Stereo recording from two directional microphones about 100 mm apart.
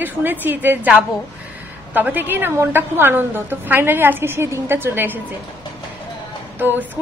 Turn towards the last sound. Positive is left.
turn(degrees=-20)  # may be behind; listen again after turning